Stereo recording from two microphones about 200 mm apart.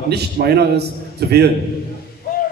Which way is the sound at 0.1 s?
55° right (ahead or behind).